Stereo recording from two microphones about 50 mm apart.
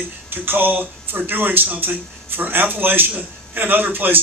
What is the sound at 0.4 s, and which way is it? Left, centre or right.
Speech, right.